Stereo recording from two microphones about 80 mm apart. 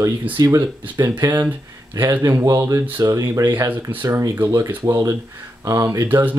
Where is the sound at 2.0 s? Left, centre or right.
Right.